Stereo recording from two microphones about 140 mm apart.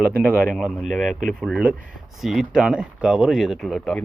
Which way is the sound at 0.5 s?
Centre (ahead or behind).